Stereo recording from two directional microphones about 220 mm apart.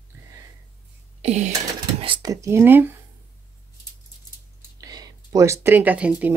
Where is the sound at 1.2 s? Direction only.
30° right (ahead or behind).